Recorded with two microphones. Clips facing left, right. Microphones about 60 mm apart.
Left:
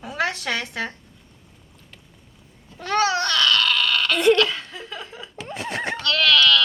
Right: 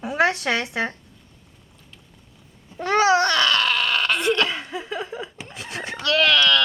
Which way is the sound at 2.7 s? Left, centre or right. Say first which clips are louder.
Right 4 dB; centre.